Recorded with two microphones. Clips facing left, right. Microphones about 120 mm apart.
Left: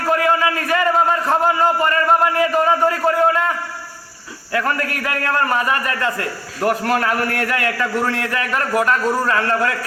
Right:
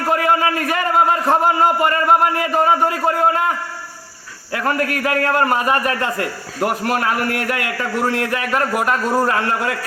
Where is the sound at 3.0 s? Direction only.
25° right (ahead or behind).